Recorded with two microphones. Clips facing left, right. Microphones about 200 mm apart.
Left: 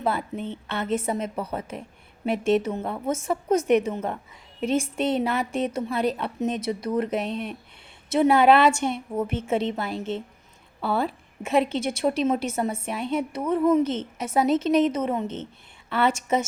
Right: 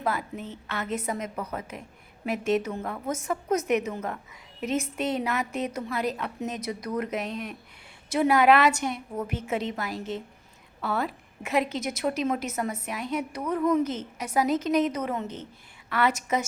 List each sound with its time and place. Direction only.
0.0 s a woman's voice: 30° left (ahead or behind)